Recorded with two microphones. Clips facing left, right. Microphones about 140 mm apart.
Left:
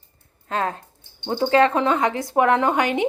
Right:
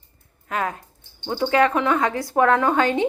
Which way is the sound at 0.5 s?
30° left (ahead or behind).